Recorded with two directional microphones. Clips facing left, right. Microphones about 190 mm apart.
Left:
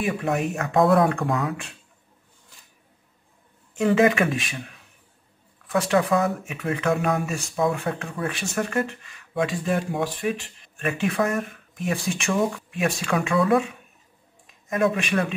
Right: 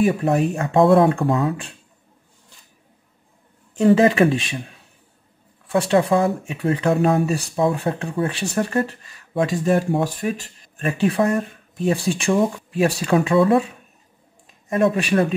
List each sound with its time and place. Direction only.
0.0 s speech: 35° right (ahead or behind)
3.7 s speech: 35° right (ahead or behind)
14.7 s speech: 35° right (ahead or behind)